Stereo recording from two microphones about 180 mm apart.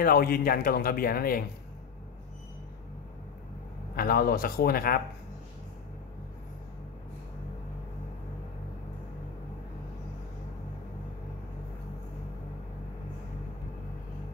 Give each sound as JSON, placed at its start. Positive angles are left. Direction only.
{"t": 0.0, "sound": "speech", "side_deg": 55}
{"t": 3.9, "sound": "speech", "side_deg": 55}